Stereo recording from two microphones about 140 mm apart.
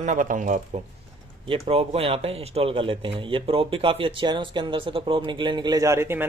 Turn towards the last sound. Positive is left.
turn(degrees=-15)  # may be behind; listen again after turning